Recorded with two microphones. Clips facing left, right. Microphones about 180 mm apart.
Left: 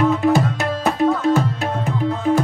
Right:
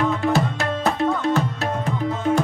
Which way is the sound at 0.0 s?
Centre (ahead or behind).